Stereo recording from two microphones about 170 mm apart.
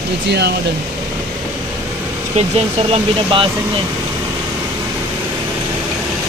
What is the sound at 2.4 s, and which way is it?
Speech, 35° right (ahead or behind).